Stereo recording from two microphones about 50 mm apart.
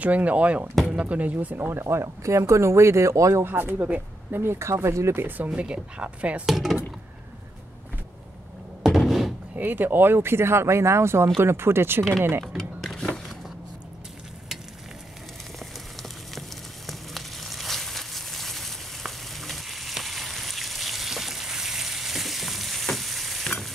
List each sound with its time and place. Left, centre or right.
0.0 s speech: right
1.7 s speech: right
2.2 s speech: right
3.4 s speech: right
4.4 s speech: right
5.5 s speech: right
6.4 s speech: centre
8.8 s a sound: centre
9.6 s speech: right
12.5 s a sound: centre
15.6 s a sound: centre
23.4 s stir: centre